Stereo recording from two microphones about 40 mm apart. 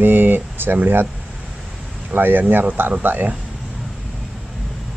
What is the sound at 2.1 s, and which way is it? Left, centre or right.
Speech, right.